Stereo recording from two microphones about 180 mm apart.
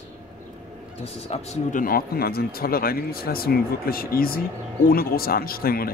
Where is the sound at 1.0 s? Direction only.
35° left (ahead or behind).